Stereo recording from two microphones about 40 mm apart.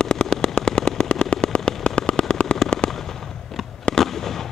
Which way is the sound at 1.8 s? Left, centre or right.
Left.